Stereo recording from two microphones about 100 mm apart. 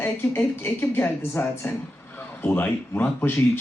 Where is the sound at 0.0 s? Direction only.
20° left (ahead or behind).